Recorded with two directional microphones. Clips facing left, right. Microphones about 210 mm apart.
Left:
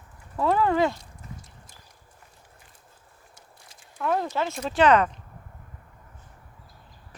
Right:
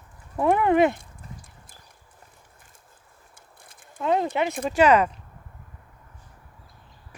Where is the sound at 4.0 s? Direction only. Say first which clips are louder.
Right 3 dB; 20° right (ahead or behind).